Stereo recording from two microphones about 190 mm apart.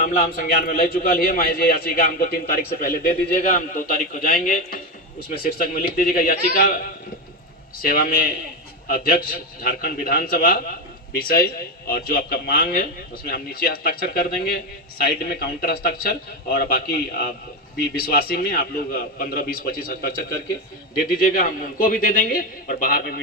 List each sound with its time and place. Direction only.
0.0 s a man's voice: 45° left (ahead or behind)
7.8 s a man's voice: 50° left (ahead or behind)